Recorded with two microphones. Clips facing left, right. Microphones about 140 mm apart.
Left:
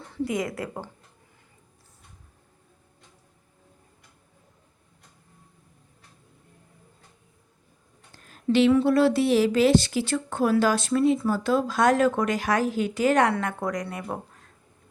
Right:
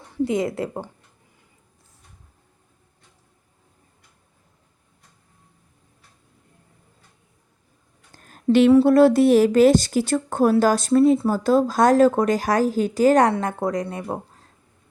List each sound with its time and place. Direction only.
0.3 s a woman's voice: 25° right (ahead or behind)
8.1 s a sound: 45° right (ahead or behind)
8.7 s a woman's voice: 40° right (ahead or behind)